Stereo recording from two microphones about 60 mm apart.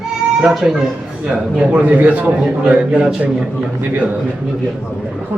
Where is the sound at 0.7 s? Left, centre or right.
Centre.